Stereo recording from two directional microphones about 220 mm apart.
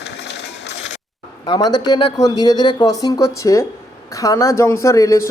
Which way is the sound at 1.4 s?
20° left (ahead or behind).